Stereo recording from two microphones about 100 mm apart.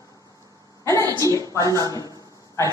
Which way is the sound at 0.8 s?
25° left (ahead or behind).